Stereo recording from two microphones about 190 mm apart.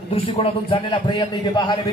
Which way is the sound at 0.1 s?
30° left (ahead or behind).